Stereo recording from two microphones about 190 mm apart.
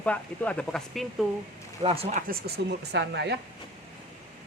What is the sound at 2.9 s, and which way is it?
Speech, 65° right (ahead or behind).